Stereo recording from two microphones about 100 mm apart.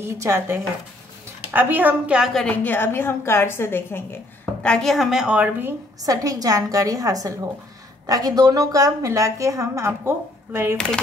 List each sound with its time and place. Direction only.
0.0 s speech: 30° right (ahead or behind)
1.5 s a woman's voice: 20° right (ahead or behind)
2.3 s a woman's voice: 15° left (ahead or behind)
4.6 s a woman's voice: 10° left (ahead or behind)
4.9 s a woman's voice: 5° right (ahead or behind)
6.0 s a woman's voice: 35° right (ahead or behind)